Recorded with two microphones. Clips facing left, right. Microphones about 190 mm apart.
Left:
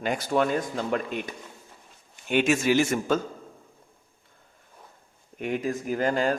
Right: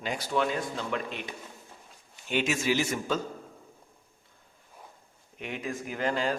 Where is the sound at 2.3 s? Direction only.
55° left (ahead or behind).